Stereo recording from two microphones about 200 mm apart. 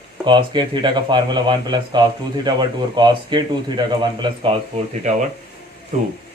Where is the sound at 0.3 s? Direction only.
25° right (ahead or behind).